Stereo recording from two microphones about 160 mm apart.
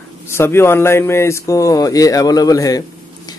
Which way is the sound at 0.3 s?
15° left (ahead or behind).